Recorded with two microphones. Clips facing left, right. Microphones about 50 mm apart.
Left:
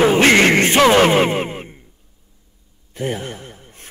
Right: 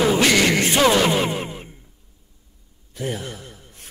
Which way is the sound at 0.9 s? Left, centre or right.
Left.